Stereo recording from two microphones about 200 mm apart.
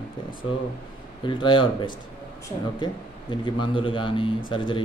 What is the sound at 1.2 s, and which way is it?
Speech, 25° left (ahead or behind).